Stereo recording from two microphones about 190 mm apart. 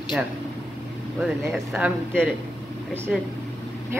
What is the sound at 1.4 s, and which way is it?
Speech, 5° right (ahead or behind).